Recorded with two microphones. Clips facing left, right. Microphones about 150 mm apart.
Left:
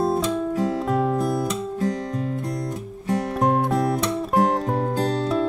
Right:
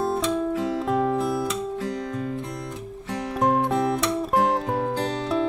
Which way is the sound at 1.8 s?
45° left (ahead or behind).